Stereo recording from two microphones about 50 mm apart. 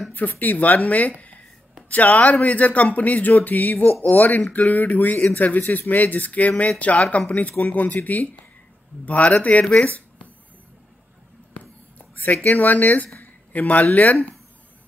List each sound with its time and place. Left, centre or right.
0.1 s speech: left
12.4 s speech: left